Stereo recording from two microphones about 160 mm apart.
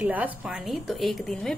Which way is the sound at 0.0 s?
10° right (ahead or behind).